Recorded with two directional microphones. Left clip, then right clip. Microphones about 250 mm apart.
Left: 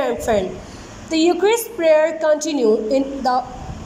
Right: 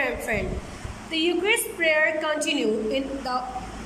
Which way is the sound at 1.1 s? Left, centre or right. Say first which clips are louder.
Left 7 dB; centre.